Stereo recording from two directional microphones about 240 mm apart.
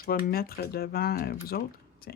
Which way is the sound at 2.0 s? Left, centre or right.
Left.